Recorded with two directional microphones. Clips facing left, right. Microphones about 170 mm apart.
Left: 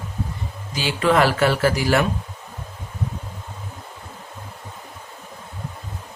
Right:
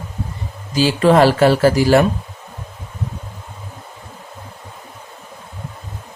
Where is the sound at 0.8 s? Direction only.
35° right (ahead or behind).